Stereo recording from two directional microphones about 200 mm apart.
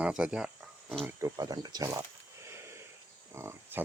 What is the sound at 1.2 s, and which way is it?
Speech, 15° right (ahead or behind).